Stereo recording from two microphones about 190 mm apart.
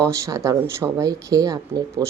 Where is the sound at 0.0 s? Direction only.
15° right (ahead or behind).